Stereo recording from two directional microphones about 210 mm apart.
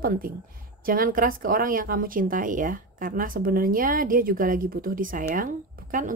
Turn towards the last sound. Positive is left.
turn(degrees=-40)  # may be behind; listen again after turning